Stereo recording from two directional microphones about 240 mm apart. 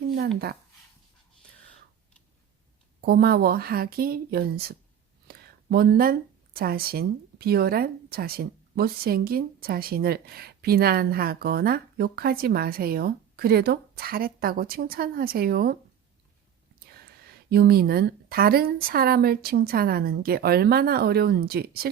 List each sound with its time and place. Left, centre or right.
0.2 s speech: right
3.0 s speech: right
17.5 s speech: right